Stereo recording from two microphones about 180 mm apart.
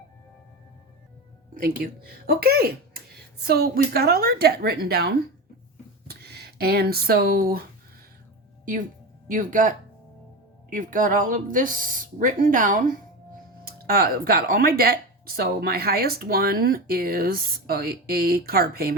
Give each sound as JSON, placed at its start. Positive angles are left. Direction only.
{"t": 1.5, "sound": "speech", "side_deg": -55}
{"t": 9.2, "sound": "speech", "side_deg": -50}
{"t": 13.7, "sound": "speech", "side_deg": -55}